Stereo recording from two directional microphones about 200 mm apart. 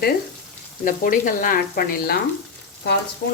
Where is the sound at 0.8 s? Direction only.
45° left (ahead or behind).